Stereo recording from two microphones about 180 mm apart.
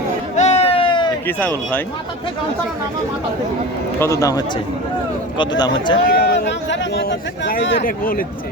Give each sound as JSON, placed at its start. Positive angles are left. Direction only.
{"t": 0.3, "sound": "a sound", "side_deg": 35}
{"t": 1.3, "sound": "speech", "side_deg": 10}
{"t": 4.0, "sound": "speech", "side_deg": 15}
{"t": 6.1, "sound": "speech", "side_deg": 65}
{"t": 7.8, "sound": "speech", "side_deg": 50}